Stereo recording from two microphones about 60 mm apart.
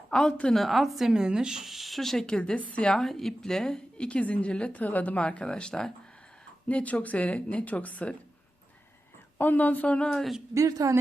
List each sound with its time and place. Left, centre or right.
0.1 s a woman's voice: centre
0.5 s speech: centre
2.3 s speech: left
2.8 s a woman's voice: centre
6.7 s speech: left
9.4 s speech: left
10.5 s speech: right